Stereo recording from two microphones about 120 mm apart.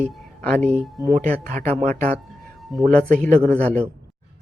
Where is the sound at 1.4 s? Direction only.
80° right.